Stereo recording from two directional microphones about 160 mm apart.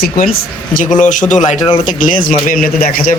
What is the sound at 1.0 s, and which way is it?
A man's voice, 50° left (ahead or behind).